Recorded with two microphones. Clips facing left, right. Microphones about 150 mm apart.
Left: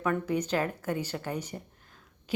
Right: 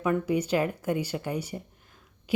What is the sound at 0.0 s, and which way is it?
Speech, 10° right (ahead or behind).